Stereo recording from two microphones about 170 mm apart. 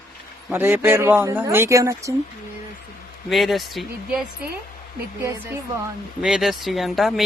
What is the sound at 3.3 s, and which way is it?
Speech, centre (ahead or behind).